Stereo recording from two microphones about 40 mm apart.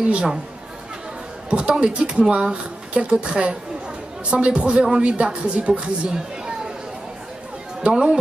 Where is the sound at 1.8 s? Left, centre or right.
Right.